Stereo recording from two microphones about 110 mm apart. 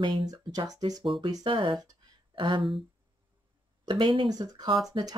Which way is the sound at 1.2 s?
45° right (ahead or behind).